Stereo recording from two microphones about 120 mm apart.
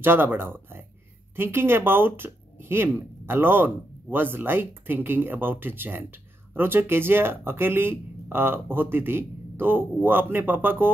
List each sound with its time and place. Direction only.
0.0 s speech: 15° right (ahead or behind)